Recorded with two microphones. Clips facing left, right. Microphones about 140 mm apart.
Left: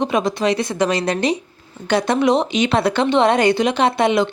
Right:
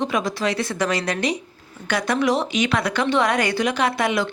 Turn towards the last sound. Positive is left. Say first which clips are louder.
# left 5 dB
turn(degrees=25)  # may be behind; listen again after turning